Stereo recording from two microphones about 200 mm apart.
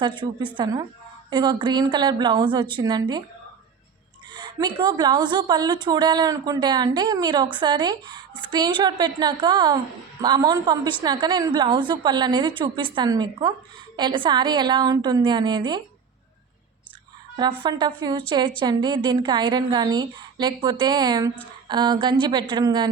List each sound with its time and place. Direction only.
0.0 s a woman's voice: 25° right (ahead or behind)
4.4 s a woman's voice: 20° right (ahead or behind)
17.6 s a woman's voice: 20° right (ahead or behind)